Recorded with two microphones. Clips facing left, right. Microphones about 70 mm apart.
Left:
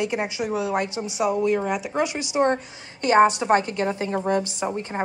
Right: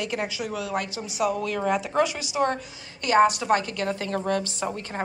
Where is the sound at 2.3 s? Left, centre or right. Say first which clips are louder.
Left 4 dB; left.